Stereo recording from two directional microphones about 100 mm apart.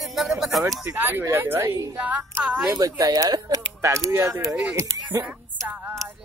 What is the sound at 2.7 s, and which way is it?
Speech, 35° right (ahead or behind).